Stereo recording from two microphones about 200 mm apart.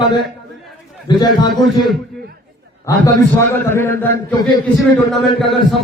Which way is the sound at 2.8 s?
15° left (ahead or behind).